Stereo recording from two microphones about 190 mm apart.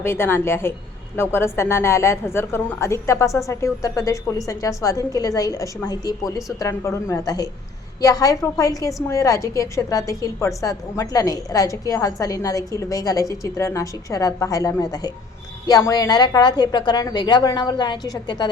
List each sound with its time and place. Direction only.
0.0 s a woman's voice: 10° left (ahead or behind)